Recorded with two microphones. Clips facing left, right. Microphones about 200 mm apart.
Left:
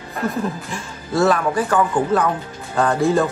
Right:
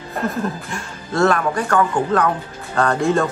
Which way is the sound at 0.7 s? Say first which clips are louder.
Even; centre (ahead or behind).